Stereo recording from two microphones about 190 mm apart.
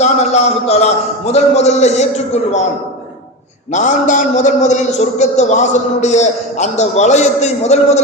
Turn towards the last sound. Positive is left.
turn(degrees=35)  # may be behind; listen again after turning